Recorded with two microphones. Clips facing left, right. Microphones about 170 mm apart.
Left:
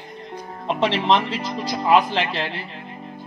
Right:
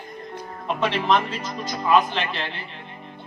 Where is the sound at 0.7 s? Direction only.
30° left (ahead or behind).